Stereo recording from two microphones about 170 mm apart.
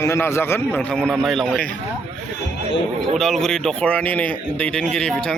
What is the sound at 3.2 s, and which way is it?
Speech, centre (ahead or behind).